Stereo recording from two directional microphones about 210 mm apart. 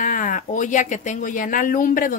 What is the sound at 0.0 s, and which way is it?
Speech, 40° left (ahead or behind).